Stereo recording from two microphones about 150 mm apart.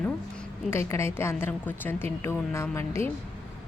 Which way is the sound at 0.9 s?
15° left (ahead or behind).